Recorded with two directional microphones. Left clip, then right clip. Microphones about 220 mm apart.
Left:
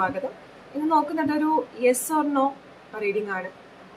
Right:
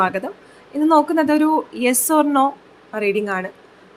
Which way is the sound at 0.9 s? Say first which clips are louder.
Right 7 dB; 40° right (ahead or behind).